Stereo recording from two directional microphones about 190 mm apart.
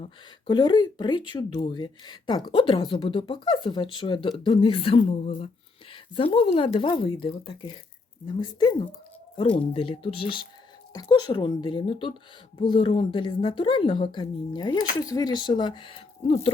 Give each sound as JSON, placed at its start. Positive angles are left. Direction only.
{"t": 0.4, "sound": "a woman's voice", "side_deg": 25}